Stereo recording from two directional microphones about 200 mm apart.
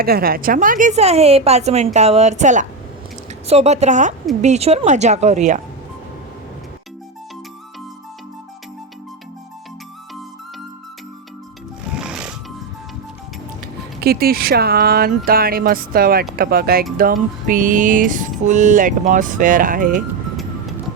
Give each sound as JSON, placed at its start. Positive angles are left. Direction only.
{"t": 0.0, "sound": "a woman's voice", "side_deg": -50}
{"t": 11.9, "sound": "music", "side_deg": -5}
{"t": 14.0, "sound": "a woman's voice", "side_deg": -50}